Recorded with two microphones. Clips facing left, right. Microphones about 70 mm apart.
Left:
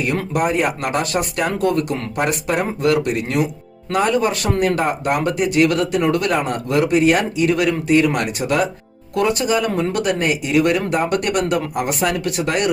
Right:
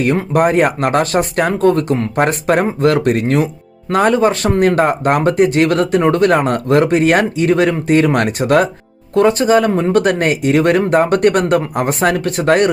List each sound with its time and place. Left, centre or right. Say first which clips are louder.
0.3 s speech: right 6 dB; right